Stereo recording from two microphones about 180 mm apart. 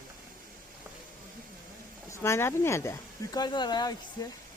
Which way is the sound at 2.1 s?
15° left (ahead or behind).